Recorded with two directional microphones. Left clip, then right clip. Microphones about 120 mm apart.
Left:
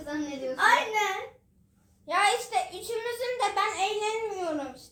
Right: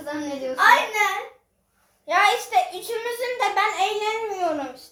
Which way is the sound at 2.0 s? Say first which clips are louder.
Right 6 dB; 10° right (ahead or behind).